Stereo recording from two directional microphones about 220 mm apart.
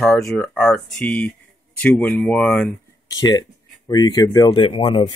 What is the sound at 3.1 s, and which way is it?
Speech, 15° left (ahead or behind).